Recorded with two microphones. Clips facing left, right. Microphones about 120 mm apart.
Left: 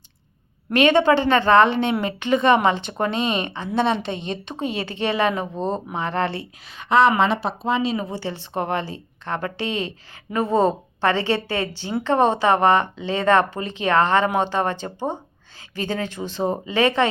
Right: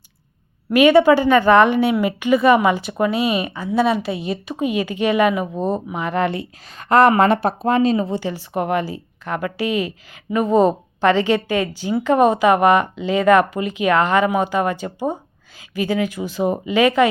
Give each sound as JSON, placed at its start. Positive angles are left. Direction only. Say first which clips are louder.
{"t": 0.7, "sound": "a woman's voice", "louder": "right 4 dB", "side_deg": -10}
{"t": 6.7, "sound": "speech", "louder": "right 3 dB", "side_deg": -50}
{"t": 7.9, "sound": "speech", "louder": "right 6 dB", "side_deg": -25}
{"t": 8.2, "sound": "speech", "louder": "right 3 dB", "side_deg": -10}